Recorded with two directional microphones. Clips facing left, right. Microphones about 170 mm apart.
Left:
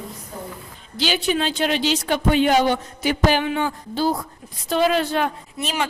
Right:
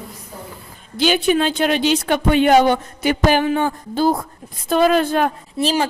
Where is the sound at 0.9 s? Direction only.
50° right (ahead or behind).